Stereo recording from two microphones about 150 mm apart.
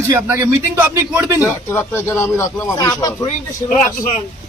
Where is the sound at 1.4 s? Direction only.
15° left (ahead or behind).